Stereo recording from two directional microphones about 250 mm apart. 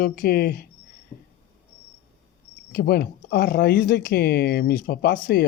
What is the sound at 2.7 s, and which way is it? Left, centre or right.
Speech, left.